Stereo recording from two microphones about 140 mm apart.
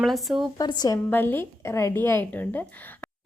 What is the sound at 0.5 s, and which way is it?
Speech, 30° left (ahead or behind).